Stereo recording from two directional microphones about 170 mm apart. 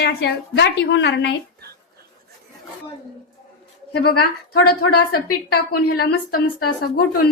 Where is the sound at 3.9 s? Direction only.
65° left (ahead or behind).